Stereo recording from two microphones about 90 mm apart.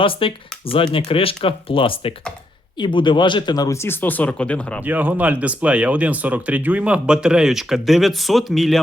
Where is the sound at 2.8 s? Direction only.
60° left (ahead or behind).